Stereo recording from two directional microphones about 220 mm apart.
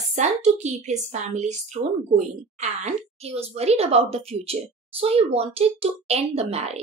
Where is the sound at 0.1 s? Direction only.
30° right (ahead or behind).